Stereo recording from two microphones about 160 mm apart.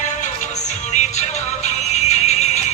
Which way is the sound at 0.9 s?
45° left (ahead or behind).